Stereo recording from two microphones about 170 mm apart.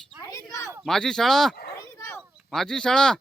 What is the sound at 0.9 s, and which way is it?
Speech, 5° left (ahead or behind).